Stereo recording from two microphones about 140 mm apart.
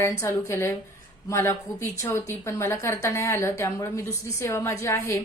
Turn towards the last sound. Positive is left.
turn(degrees=20)  # may be behind; listen again after turning